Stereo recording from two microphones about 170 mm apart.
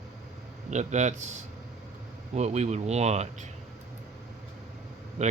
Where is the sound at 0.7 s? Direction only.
45° right (ahead or behind).